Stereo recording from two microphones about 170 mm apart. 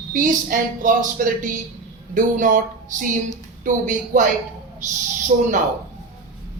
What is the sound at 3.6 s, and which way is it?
Speech, 50° right (ahead or behind).